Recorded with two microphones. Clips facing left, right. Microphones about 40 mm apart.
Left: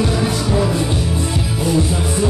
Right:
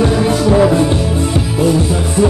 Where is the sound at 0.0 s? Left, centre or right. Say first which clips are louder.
Right 6 dB; right.